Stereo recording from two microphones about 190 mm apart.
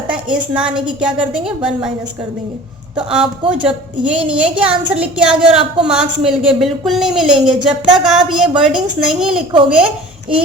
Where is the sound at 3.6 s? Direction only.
5° right (ahead or behind).